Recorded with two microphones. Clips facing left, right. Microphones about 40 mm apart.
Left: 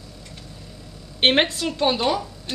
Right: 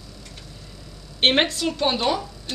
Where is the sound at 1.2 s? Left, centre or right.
Centre.